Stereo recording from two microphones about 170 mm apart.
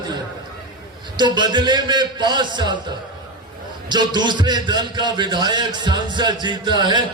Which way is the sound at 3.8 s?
25° right (ahead or behind).